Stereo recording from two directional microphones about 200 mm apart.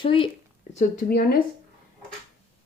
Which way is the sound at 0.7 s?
45° left (ahead or behind).